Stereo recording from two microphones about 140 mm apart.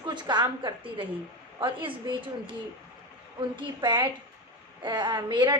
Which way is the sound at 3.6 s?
30° right (ahead or behind).